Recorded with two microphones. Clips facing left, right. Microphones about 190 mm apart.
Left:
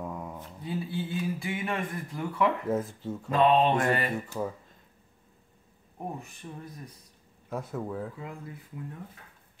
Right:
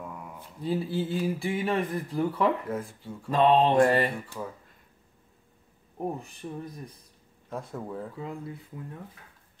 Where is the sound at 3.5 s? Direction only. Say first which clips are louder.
Right 6 dB; 30° right (ahead or behind).